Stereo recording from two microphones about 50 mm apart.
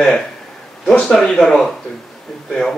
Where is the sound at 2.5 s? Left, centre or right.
Centre.